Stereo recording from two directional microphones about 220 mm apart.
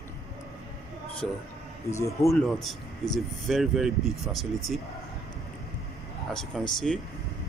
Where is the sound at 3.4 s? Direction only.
Centre (ahead or behind).